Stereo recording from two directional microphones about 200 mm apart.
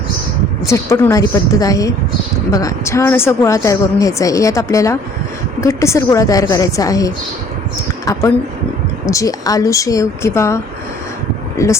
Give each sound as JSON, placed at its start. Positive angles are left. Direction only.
{"t": 0.7, "sound": "a woman's voice", "side_deg": 10}
{"t": 9.0, "sound": "a woman's voice", "side_deg": 15}